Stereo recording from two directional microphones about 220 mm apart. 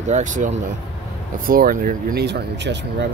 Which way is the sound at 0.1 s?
35° right (ahead or behind).